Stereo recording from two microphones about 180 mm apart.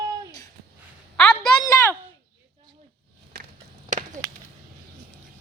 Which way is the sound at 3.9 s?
45° right (ahead or behind).